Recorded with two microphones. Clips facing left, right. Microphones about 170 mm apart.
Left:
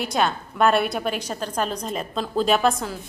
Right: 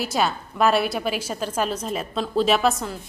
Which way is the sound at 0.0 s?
5° right (ahead or behind).